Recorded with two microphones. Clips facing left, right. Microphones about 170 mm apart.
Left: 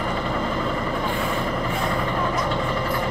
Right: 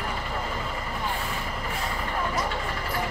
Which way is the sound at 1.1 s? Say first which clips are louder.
Left 8 dB; 55° left (ahead or behind).